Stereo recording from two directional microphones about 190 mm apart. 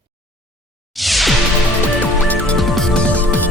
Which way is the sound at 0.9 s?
Centre (ahead or behind).